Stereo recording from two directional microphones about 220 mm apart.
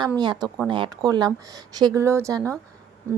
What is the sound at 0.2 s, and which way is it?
Speech, 20° right (ahead or behind).